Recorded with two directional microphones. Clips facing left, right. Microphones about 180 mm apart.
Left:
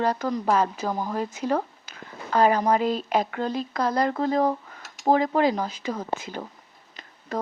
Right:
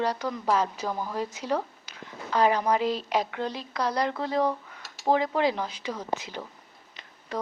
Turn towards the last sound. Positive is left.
turn(degrees=45)  # may be behind; listen again after turning